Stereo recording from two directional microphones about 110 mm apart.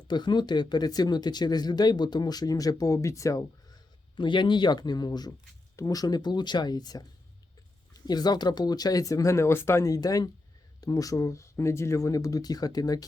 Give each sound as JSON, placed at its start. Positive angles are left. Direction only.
{"t": 0.1, "sound": "speech", "side_deg": 45}
{"t": 4.2, "sound": "speech", "side_deg": 45}